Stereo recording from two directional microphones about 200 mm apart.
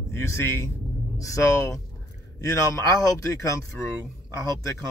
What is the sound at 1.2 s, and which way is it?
Speech, 15° left (ahead or behind).